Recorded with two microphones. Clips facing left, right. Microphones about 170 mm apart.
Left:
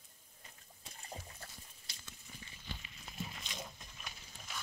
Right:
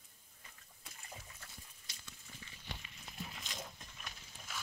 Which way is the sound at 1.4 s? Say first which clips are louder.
Left 4 dB; 35° left (ahead or behind).